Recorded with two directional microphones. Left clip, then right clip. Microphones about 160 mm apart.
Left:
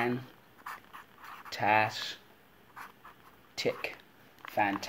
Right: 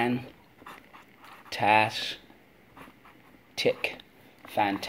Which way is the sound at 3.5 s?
10° right (ahead or behind).